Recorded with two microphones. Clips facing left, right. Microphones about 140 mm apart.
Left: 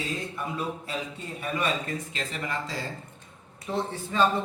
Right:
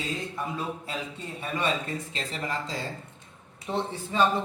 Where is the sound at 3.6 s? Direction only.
20° right (ahead or behind).